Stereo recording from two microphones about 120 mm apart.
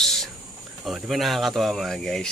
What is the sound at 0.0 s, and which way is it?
Cricket, centre (ahead or behind).